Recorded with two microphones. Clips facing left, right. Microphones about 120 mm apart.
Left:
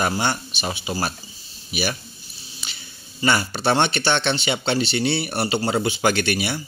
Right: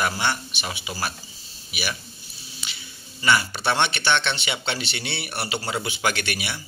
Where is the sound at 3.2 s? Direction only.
35° left (ahead or behind).